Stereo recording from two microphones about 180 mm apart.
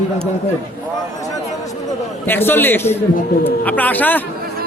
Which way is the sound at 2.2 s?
10° left (ahead or behind).